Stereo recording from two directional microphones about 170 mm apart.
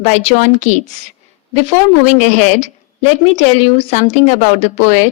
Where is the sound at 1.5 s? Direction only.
40° left (ahead or behind).